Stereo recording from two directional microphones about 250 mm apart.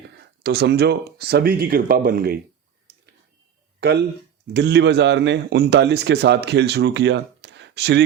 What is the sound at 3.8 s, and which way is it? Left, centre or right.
A man's voice, right.